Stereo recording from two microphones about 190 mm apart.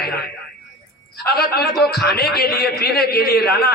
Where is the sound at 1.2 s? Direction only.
55° left (ahead or behind).